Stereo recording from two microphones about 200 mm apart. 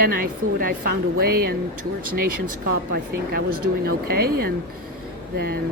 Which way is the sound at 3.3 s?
50° right (ahead or behind).